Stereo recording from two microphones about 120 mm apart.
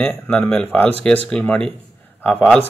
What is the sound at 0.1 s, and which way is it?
A man's voice, 15° left (ahead or behind).